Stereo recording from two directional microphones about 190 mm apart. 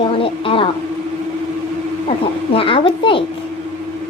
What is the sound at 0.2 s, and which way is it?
Speech, 30° left (ahead or behind).